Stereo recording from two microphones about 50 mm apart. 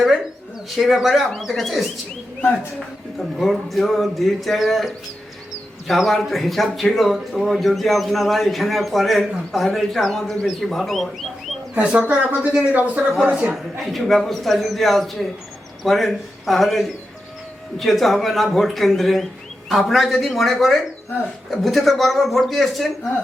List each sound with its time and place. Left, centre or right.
0.8 s speech: centre
3.2 s speech: centre
6.1 s speech: centre
11.7 s speech: right
12.5 s speech: right
13.5 s speech: centre